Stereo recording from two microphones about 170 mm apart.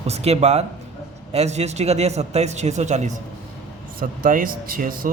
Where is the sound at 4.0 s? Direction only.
55° right (ahead or behind).